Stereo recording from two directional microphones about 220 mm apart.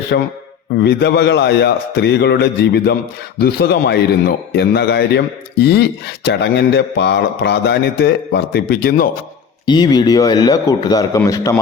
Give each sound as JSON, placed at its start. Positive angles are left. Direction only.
{"t": 0.1, "sound": "a man's voice", "side_deg": 50}
{"t": 9.6, "sound": "speech", "side_deg": 20}